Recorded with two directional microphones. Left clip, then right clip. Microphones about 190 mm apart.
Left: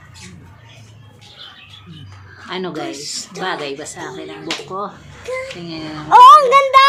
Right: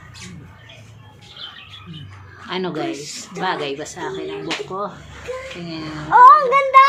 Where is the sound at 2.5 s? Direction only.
Centre (ahead or behind).